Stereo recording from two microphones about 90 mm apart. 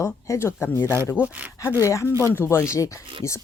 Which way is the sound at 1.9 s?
35° left (ahead or behind).